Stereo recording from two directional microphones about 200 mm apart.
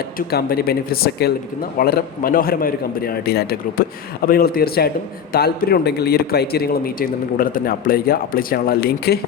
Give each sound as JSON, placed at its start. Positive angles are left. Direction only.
{"t": 0.2, "sound": "a man's voice", "side_deg": 50}